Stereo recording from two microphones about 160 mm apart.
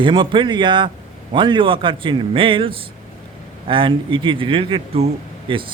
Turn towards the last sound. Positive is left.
turn(degrees=-35)  # may be behind; listen again after turning